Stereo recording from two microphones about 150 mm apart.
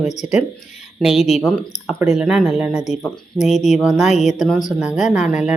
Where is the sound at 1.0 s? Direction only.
Centre (ahead or behind).